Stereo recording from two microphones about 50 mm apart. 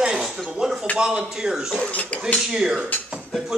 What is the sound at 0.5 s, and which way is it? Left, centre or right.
A man's voice, centre.